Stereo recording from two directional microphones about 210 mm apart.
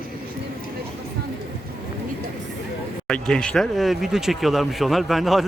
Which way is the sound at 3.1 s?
5° left (ahead or behind).